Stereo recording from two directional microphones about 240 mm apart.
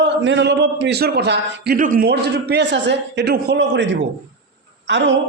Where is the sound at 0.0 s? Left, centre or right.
Right.